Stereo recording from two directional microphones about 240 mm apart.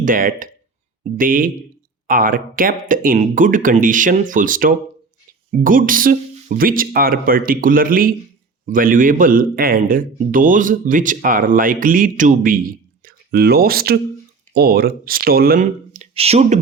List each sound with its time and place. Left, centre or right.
0.0 s speech: right